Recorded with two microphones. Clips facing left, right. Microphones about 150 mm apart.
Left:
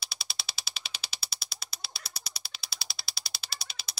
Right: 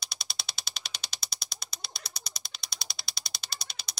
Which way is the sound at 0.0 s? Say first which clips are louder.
Even; 5° left (ahead or behind).